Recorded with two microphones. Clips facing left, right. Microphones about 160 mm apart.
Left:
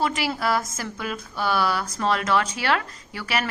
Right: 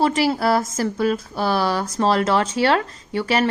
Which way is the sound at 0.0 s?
40° right (ahead or behind).